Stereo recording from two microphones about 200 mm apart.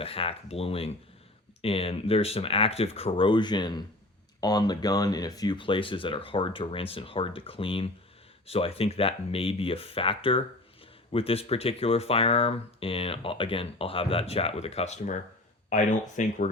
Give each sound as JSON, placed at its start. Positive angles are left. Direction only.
{"t": 0.0, "sound": "speech", "side_deg": 30}